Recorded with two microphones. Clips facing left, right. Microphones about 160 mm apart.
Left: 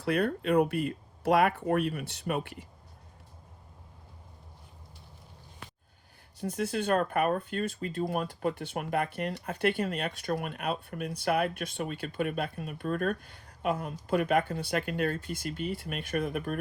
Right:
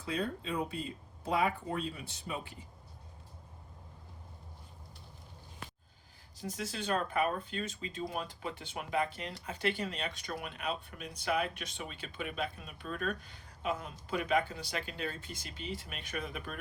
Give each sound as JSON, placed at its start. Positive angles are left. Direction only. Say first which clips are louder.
{"t": 0.0, "sound": "speech", "louder": "left 8 dB", "side_deg": 70}
{"t": 6.3, "sound": "speech", "louder": "left 9 dB", "side_deg": 60}